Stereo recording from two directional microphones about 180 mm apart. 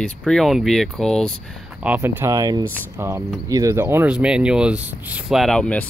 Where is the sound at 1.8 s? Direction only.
10° right (ahead or behind).